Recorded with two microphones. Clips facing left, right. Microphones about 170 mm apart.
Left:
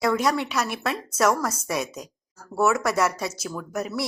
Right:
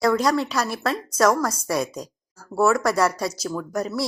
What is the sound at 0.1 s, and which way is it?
Speech, 5° left (ahead or behind).